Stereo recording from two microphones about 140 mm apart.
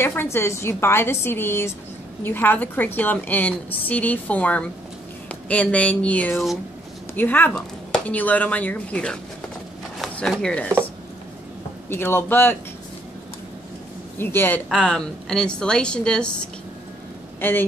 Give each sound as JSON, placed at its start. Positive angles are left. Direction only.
{"t": 0.0, "sound": "a woman's voice", "side_deg": 15}
{"t": 11.9, "sound": "a woman's voice", "side_deg": 15}
{"t": 14.1, "sound": "a woman's voice", "side_deg": 15}
{"t": 14.7, "sound": "a woman's voice", "side_deg": 5}